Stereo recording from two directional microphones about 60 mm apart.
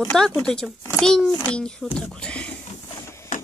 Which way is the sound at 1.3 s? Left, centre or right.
Centre.